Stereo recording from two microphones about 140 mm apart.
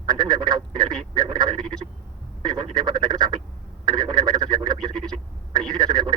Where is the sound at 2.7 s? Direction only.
30° right (ahead or behind).